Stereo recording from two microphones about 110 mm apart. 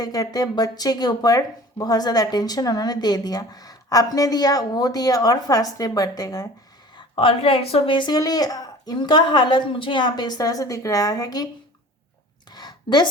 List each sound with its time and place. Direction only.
0.0 s speech: 35° left (ahead or behind)
6.9 s speech: 55° left (ahead or behind); by 11.4 s 35° left (ahead or behind)
12.5 s a sound: 40° left (ahead or behind)